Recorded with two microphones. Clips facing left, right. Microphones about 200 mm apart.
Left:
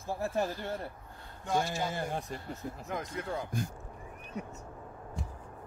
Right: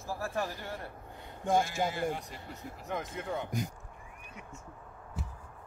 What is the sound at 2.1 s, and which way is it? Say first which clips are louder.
Speech: left 5 dB; 50° left (ahead or behind).